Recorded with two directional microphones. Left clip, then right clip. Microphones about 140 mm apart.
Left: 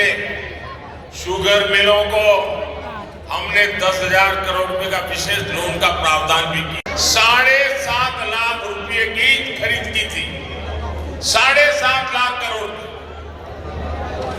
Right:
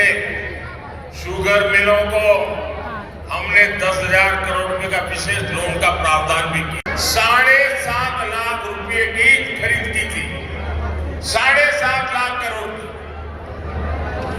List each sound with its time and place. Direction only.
1.5 s a man's voice: 5° left (ahead or behind)
11.3 s speech: centre (ahead or behind)